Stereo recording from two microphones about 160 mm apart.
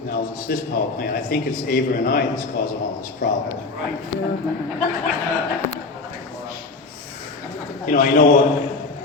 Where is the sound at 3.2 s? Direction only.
55° left (ahead or behind).